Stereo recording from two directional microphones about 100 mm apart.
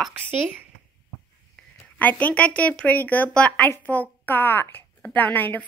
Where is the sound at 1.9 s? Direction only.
15° left (ahead or behind).